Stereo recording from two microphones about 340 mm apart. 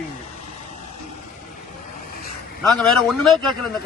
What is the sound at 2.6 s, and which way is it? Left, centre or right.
Speech, centre.